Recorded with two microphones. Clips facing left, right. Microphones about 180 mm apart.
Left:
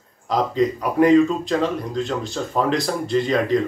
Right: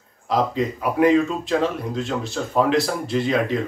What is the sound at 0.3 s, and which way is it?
Speech, centre (ahead or behind).